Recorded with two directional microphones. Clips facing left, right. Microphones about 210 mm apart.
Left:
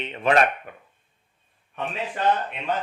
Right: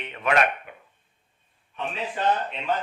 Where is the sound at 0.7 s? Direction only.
40° left (ahead or behind).